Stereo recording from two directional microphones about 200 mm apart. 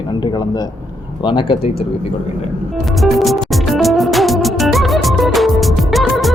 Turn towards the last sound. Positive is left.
turn(degrees=0)  # may be behind; listen again after turning